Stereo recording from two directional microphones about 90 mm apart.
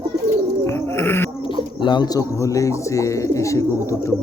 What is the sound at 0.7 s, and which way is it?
Bird, 25° left (ahead or behind).